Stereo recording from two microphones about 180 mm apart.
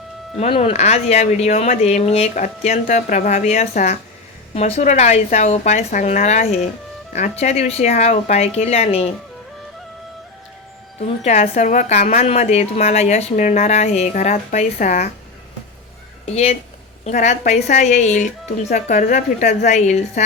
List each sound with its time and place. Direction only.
0.3 s a woman's voice: 35° left (ahead or behind)
11.2 s a woman's voice: 40° left (ahead or behind)
16.2 s a woman's voice: 35° left (ahead or behind)